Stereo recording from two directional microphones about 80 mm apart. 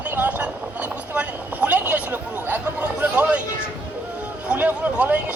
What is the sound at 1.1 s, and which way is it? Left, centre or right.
Chatter, centre.